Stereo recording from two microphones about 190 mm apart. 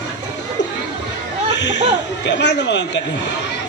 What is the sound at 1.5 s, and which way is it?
A man's voice, 65° left (ahead or behind).